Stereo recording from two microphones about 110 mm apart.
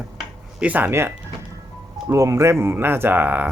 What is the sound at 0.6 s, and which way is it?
Speech, 15° right (ahead or behind).